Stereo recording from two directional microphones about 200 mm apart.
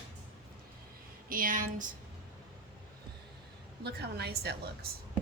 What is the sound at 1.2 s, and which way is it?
Speech, 45° right (ahead or behind).